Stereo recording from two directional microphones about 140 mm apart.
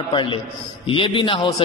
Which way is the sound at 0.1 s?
35° left (ahead or behind).